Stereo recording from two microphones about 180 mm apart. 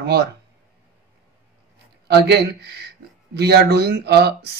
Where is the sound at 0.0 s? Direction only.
60° right (ahead or behind).